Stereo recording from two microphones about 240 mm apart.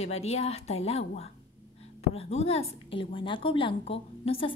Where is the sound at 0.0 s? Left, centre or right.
Left.